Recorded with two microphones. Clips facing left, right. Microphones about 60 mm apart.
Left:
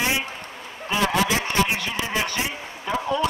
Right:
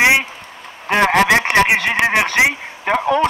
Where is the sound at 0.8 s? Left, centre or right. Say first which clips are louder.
Right 8 dB; right.